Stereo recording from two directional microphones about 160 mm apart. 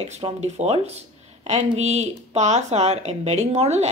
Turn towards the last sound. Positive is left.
turn(degrees=-45)  # may be behind; listen again after turning